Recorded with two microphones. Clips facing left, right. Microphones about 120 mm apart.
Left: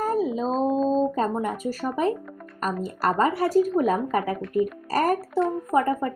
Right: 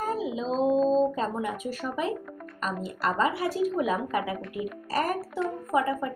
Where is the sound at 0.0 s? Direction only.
40° left (ahead or behind).